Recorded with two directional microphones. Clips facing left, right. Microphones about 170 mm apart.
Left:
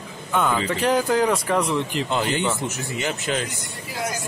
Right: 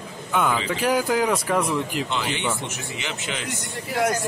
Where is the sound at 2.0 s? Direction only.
40° left (ahead or behind).